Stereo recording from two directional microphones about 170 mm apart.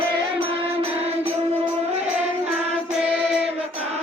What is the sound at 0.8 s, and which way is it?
Music, 35° right (ahead or behind).